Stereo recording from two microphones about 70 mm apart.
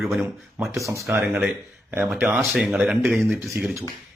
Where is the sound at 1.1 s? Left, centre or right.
Right.